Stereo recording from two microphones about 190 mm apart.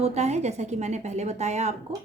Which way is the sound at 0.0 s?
35° right (ahead or behind).